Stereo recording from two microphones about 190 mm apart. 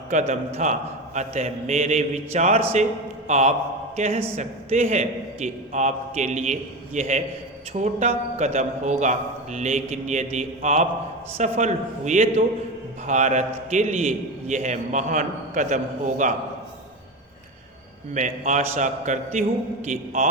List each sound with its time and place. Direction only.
0.1 s a man's voice: 40° right (ahead or behind)
18.1 s a man's voice: 40° right (ahead or behind)